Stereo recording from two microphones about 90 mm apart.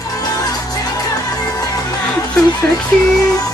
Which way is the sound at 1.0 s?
40° left (ahead or behind).